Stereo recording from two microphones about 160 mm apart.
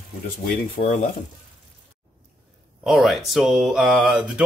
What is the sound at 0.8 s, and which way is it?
Speech, 45° left (ahead or behind).